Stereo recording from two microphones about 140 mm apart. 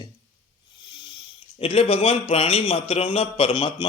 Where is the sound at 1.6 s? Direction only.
40° left (ahead or behind).